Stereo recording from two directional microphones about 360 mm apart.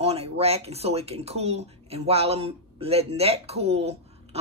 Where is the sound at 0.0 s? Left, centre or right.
Centre.